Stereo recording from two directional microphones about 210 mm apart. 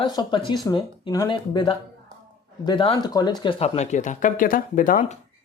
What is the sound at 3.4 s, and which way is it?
Speech, 30° left (ahead or behind).